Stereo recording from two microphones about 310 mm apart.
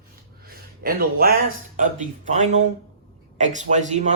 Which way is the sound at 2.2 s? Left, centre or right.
Right.